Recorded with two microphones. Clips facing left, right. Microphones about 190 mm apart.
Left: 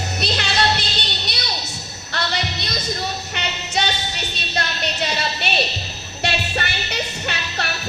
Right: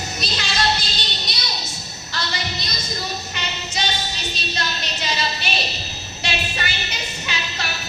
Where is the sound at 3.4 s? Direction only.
65° left (ahead or behind).